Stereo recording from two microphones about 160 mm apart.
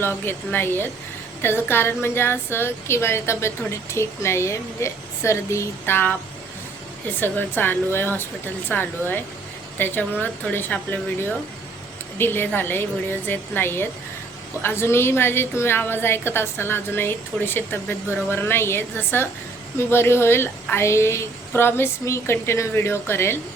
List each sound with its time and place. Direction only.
0.0 s a woman's voice: 15° left (ahead or behind)
12.2 s a woman's voice: 15° left (ahead or behind)